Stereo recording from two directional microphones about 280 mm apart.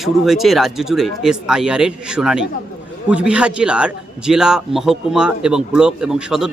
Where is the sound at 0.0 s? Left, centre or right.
Centre.